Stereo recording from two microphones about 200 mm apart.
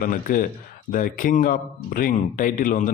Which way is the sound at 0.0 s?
45° left (ahead or behind).